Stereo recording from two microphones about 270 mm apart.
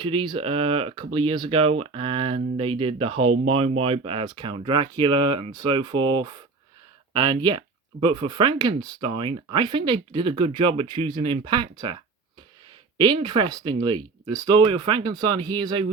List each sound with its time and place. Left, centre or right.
0.0 s speech: centre
13.0 s speech: centre